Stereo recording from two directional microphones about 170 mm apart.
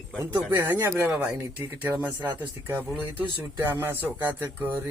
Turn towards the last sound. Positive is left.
turn(degrees=-10)  # may be behind; listen again after turning